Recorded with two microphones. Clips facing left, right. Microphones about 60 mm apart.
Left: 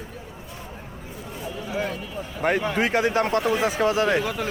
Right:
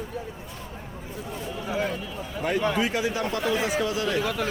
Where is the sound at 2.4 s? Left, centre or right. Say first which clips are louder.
Left 2 dB; left.